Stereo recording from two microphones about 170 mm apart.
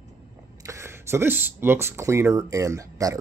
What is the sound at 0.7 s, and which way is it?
Speech, 15° right (ahead or behind).